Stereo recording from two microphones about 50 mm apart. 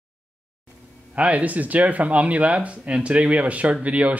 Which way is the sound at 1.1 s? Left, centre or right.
Right.